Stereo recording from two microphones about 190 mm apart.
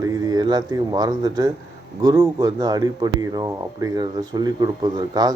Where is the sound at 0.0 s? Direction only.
15° right (ahead or behind).